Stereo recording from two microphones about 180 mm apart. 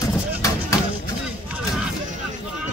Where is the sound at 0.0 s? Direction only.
15° left (ahead or behind).